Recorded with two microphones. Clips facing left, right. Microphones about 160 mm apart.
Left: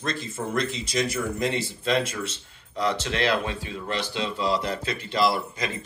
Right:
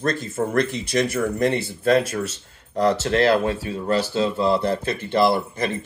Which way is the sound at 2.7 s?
45° right (ahead or behind).